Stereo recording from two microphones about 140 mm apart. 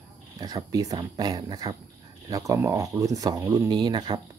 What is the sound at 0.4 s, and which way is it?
Speech, 30° right (ahead or behind).